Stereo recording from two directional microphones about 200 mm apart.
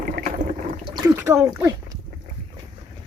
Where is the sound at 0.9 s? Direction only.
15° right (ahead or behind).